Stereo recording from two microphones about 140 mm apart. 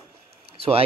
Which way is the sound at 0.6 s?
40° right (ahead or behind).